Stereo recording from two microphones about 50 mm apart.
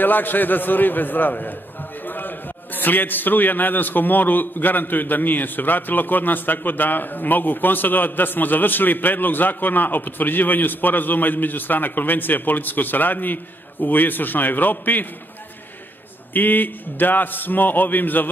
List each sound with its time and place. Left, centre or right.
0.0 s a man's voice: left
16.3 s a man's voice: left